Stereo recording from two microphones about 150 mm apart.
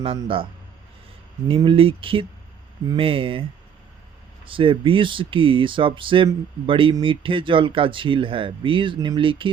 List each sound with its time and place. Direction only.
0.2 s speech: 35° right (ahead or behind)
1.5 s speech: 35° right (ahead or behind)
4.4 s speech: 35° right (ahead or behind)